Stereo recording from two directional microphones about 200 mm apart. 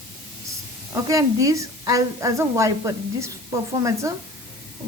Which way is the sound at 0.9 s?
15° right (ahead or behind).